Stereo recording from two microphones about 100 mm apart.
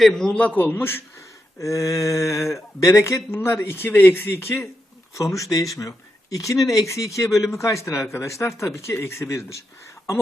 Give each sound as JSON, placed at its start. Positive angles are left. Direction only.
{"t": 0.0, "sound": "a man's voice", "side_deg": 5}
{"t": 1.5, "sound": "speech", "side_deg": 30}